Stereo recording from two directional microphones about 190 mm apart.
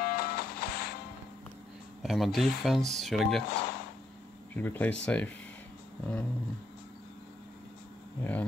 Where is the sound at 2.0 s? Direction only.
Centre (ahead or behind).